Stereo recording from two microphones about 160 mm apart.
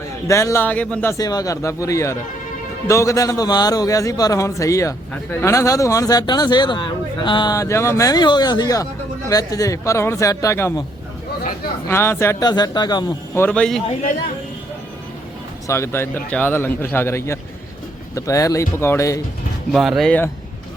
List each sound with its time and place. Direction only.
0.3 s a man's voice: 20° left (ahead or behind)
1.1 s speech: 25° left (ahead or behind)
11.9 s speech: 15° left (ahead or behind)
13.5 s speech: 5° left (ahead or behind)
15.6 s a man's voice: 15° left (ahead or behind)
19.7 s speech: centre (ahead or behind)